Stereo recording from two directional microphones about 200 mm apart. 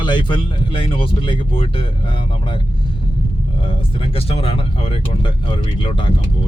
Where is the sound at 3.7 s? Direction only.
25° left (ahead or behind).